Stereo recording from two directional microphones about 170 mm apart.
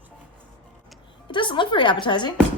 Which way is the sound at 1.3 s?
30° left (ahead or behind).